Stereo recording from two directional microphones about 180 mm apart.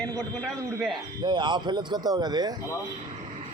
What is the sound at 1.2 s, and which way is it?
Speech, 25° right (ahead or behind).